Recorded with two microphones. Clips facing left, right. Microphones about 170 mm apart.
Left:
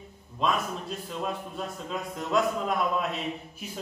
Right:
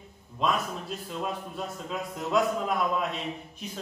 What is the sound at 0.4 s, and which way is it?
A man's voice, centre (ahead or behind).